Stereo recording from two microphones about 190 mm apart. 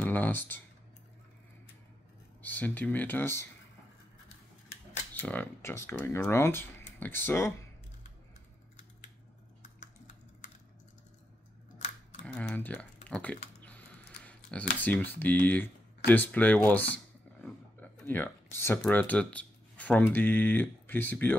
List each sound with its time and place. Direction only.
0.0 s speech: 10° left (ahead or behind)
2.4 s speech: 10° left (ahead or behind)
5.2 s speech: 10° left (ahead or behind)
9.6 s typing: 40° left (ahead or behind)
12.3 s typing: 5° left (ahead or behind)
18.8 s speech: 10° left (ahead or behind)